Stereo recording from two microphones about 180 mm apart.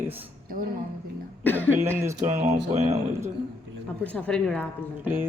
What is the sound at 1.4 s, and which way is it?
Cough, 10° left (ahead or behind).